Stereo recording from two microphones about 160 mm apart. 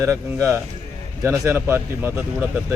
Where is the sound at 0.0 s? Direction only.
20° right (ahead or behind).